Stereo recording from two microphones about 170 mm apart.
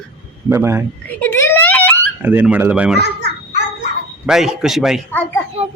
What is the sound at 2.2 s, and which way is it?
Speech, 10° right (ahead or behind).